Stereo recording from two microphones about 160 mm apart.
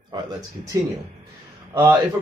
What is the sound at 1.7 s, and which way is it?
Speech, 15° right (ahead or behind).